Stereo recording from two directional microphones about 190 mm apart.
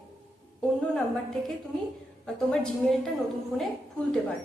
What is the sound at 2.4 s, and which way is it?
Speech, 5° left (ahead or behind).